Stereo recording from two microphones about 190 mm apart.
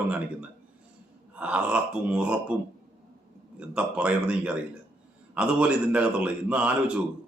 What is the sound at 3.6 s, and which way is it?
A man's voice, 5° right (ahead or behind).